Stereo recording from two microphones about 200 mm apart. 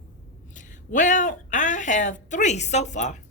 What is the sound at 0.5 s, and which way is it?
Speech, 40° left (ahead or behind).